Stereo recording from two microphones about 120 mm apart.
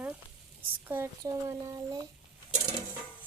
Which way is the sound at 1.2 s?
25° right (ahead or behind).